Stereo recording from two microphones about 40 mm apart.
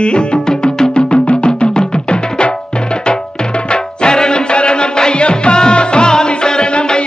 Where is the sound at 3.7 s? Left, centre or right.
Left.